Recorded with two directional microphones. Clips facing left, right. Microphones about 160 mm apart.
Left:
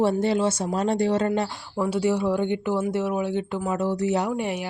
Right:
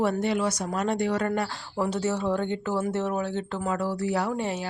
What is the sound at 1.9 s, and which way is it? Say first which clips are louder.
Speech: left 5 dB; 15° left (ahead or behind).